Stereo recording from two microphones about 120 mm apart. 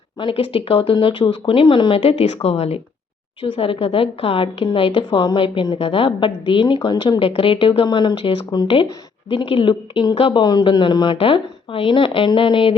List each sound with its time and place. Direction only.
0.2 s a woman's voice: 45° left (ahead or behind)